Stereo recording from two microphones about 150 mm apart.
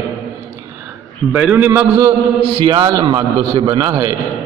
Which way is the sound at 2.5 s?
30° right (ahead or behind).